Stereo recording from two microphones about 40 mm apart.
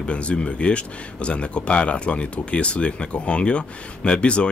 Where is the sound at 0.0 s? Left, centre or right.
Left.